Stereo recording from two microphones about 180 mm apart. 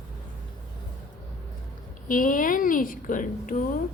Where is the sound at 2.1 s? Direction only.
50° left (ahead or behind).